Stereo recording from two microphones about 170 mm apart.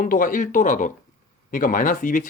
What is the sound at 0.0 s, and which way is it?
Speech, 55° left (ahead or behind).